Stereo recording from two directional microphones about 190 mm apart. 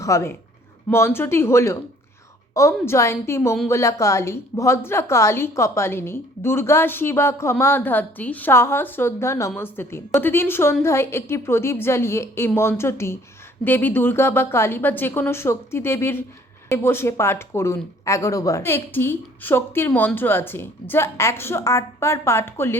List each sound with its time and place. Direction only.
0.0 s speech: 15° left (ahead or behind)